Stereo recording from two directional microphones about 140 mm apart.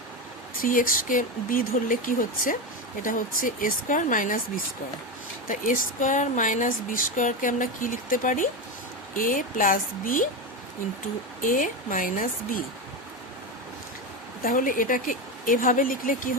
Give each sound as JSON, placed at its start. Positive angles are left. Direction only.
{"t": 0.6, "sound": "speech", "side_deg": 75}
{"t": 11.3, "sound": "speech", "side_deg": 75}
{"t": 14.4, "sound": "speech", "side_deg": 80}